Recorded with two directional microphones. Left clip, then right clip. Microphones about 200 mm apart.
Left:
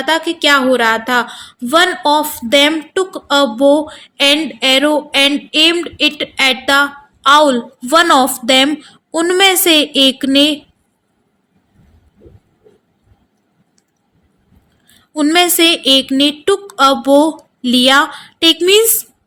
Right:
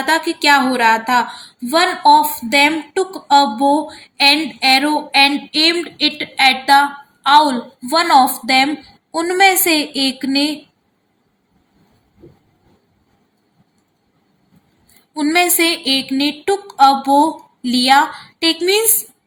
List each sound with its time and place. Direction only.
0.4 s speech: 35° left (ahead or behind)
15.1 s speech: 40° left (ahead or behind)